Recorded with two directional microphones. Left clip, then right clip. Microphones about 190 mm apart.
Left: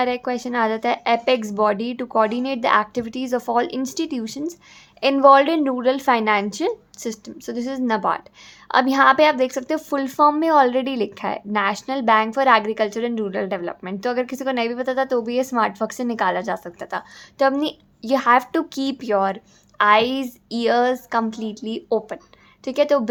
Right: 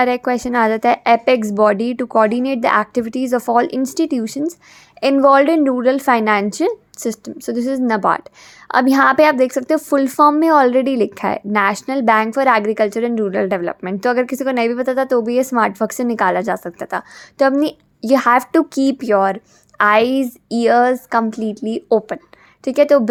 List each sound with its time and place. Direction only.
0.0 s a woman's voice: 30° right (ahead or behind)